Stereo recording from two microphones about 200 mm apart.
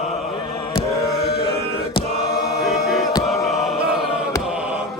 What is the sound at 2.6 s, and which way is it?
Music, centre (ahead or behind).